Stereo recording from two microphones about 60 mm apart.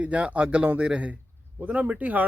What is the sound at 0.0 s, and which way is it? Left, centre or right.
A man's voice, right.